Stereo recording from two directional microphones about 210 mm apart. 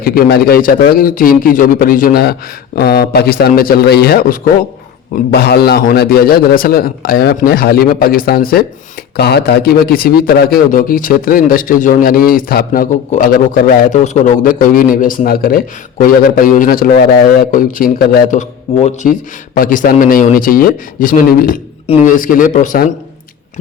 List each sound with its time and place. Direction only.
0.0 s a man's voice: 45° left (ahead or behind)